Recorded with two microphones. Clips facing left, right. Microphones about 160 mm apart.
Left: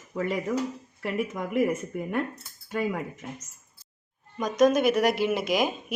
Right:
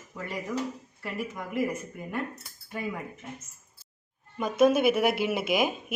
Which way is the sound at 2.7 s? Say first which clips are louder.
Left 6 dB; 80° left.